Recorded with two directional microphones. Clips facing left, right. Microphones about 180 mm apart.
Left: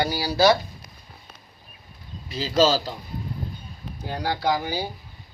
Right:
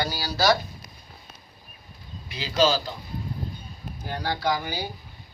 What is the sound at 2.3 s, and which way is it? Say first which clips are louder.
Speech: left 3 dB; 35° left (ahead or behind).